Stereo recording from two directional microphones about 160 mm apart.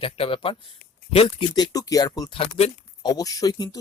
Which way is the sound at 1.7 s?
20° left (ahead or behind).